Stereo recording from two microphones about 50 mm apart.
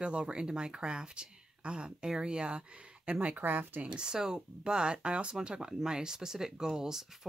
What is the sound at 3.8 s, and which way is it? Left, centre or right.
Speech, centre.